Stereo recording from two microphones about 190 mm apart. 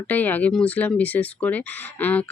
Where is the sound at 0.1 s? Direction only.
10° left (ahead or behind).